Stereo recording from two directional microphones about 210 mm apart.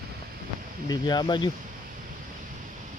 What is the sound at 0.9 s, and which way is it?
Speech, 20° left (ahead or behind).